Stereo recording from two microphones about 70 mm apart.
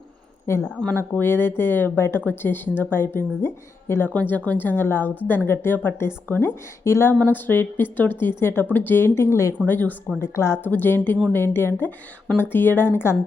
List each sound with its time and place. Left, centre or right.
0.5 s speech: left
4.1 s speech: left
9.6 s speech: left
10.2 s speech: left
10.6 s speech: left